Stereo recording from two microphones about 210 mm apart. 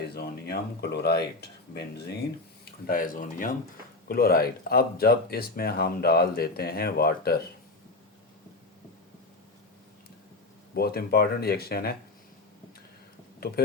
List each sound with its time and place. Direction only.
0.1 s speech: 50° left (ahead or behind)
2.8 s speech: 40° left (ahead or behind)
10.8 s speech: 45° left (ahead or behind)